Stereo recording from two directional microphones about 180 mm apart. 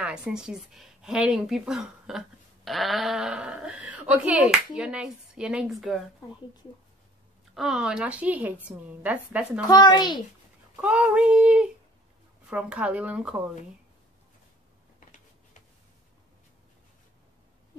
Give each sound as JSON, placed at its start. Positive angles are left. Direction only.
{"t": 0.0, "sound": "a woman's voice", "side_deg": -5}
{"t": 7.5, "sound": "a woman's voice", "side_deg": 0}
{"t": 9.7, "sound": "a woman's voice", "side_deg": 25}
{"t": 10.8, "sound": "a woman's voice", "side_deg": -5}